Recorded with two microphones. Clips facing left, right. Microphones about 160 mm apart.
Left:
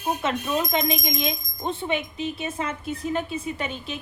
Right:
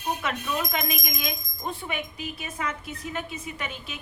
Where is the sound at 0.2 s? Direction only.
25° left (ahead or behind).